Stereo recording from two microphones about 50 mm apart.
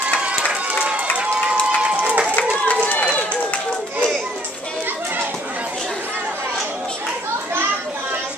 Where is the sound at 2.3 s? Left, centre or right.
Left.